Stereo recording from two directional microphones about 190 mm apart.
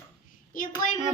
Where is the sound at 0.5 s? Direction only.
45° left (ahead or behind).